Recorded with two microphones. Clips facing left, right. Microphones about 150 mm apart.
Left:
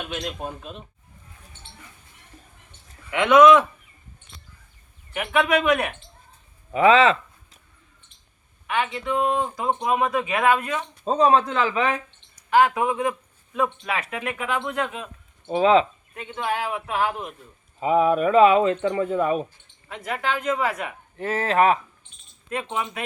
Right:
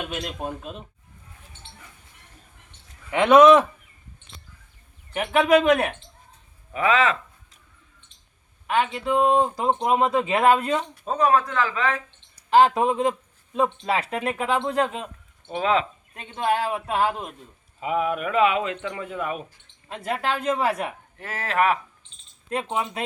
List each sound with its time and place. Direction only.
0.1 s speech: 5° right (ahead or behind)
3.1 s speech: 35° right (ahead or behind)
5.1 s speech: 35° right (ahead or behind)
6.7 s a sound: 30° left (ahead or behind)
8.6 s speech: 35° right (ahead or behind)
11.0 s speech: 25° left (ahead or behind)
12.5 s speech: 30° right (ahead or behind)
15.4 s speech: 30° left (ahead or behind)
16.1 s speech: 30° right (ahead or behind)
17.7 s speech: 35° left (ahead or behind)
19.9 s speech: 30° right (ahead or behind)
21.2 s speech: 25° left (ahead or behind)
22.4 s speech: 30° right (ahead or behind)